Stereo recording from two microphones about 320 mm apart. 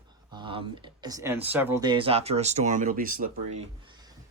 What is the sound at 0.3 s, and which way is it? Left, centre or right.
Speech, centre.